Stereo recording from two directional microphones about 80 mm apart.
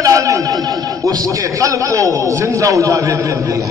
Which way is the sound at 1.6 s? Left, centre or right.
Right.